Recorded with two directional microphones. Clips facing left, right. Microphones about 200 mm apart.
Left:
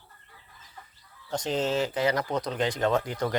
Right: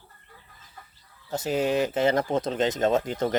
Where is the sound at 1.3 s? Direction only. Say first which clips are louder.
Right 3 dB; 5° right (ahead or behind).